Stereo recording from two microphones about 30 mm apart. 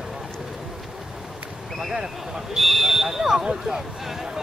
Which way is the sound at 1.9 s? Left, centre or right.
Centre.